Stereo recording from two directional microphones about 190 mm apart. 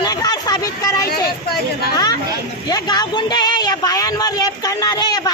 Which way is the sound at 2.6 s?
20° left (ahead or behind).